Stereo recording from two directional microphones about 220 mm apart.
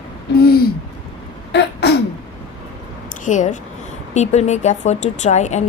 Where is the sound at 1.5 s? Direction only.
50° left (ahead or behind).